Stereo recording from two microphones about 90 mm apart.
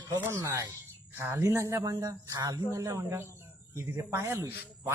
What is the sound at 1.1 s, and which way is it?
Speech, 25° right (ahead or behind).